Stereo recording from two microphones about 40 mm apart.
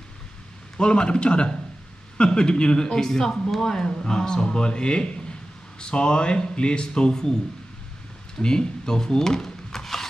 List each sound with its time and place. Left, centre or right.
0.7 s speech: left
8.4 s speech: left